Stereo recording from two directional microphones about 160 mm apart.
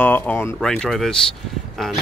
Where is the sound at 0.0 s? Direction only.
10° left (ahead or behind).